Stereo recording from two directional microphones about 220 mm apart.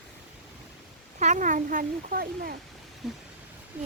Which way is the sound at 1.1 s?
35° right (ahead or behind).